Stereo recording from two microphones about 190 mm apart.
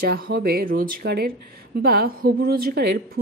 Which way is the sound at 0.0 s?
55° right (ahead or behind).